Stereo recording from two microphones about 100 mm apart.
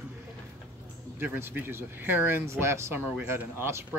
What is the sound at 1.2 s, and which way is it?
Speech, 20° right (ahead or behind).